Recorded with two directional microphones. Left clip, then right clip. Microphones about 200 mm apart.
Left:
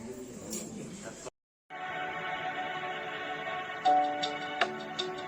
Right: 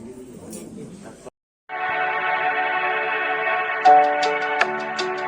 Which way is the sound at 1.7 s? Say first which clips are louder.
Right 14 dB; 50° right (ahead or behind).